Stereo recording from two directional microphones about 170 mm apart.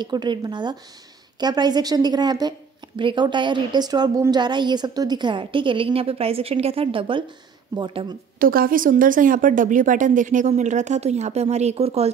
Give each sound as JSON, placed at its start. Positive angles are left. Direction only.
{"t": 0.0, "sound": "a woman's voice", "side_deg": -25}
{"t": 8.4, "sound": "speech", "side_deg": -55}